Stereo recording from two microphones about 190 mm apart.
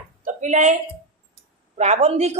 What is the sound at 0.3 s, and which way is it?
Speech, 40° right (ahead or behind).